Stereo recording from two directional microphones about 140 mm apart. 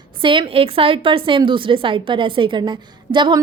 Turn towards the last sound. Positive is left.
turn(degrees=-35)  # may be behind; listen again after turning